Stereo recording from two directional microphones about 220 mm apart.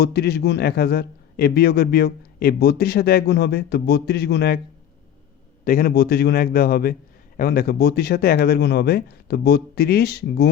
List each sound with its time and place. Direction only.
0.0 s a man's voice: 45° left (ahead or behind)
5.6 s a man's voice: 40° left (ahead or behind)